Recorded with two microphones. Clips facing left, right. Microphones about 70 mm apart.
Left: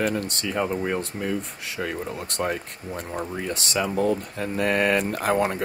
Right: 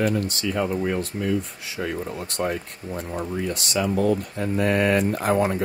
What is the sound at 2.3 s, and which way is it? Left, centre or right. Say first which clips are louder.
Speech: right 1 dB; left.